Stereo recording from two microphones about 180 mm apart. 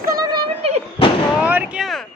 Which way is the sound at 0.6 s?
35° right (ahead or behind).